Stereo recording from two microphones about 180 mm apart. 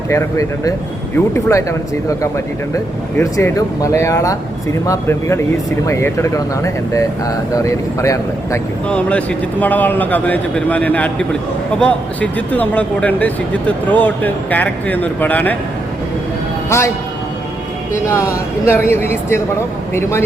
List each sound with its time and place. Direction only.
0.1 s speech: 15° left (ahead or behind)
2.7 s speech: 15° left (ahead or behind)
8.9 s speech: 5° left (ahead or behind)
16.6 s speech: 15° left (ahead or behind)
18.6 s speech: 15° left (ahead or behind)